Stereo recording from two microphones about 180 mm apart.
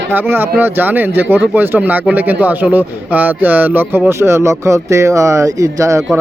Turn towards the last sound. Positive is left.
turn(degrees=-15)  # may be behind; listen again after turning